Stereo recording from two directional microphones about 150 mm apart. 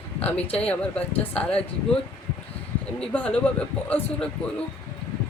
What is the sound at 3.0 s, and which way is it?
Speech, 10° left (ahead or behind).